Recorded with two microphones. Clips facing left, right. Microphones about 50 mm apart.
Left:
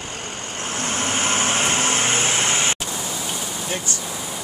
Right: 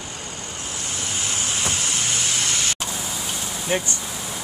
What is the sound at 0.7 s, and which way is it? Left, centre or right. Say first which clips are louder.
Vehicle: left 8 dB; left.